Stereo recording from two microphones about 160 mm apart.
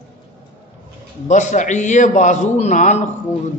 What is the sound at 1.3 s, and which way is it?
A man's voice, 50° left (ahead or behind).